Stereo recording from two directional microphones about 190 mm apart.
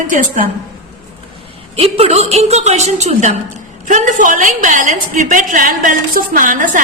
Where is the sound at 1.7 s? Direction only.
30° right (ahead or behind).